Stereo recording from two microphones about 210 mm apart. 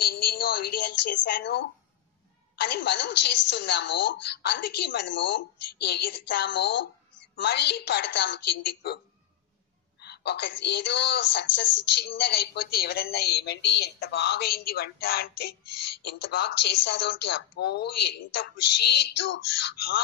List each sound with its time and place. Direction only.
0.0 s a sound: 45° left (ahead or behind)
2.6 s a woman's voice: 55° left (ahead or behind)
9.9 s a woman's voice: 50° left (ahead or behind)